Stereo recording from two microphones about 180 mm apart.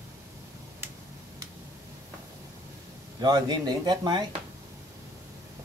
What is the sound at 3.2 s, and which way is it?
Speech, 20° right (ahead or behind).